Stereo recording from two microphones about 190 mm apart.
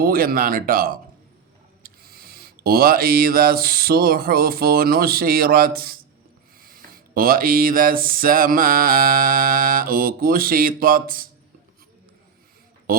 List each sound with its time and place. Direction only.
0.0 s speech: 50° right (ahead or behind)
12.9 s speech: 50° right (ahead or behind)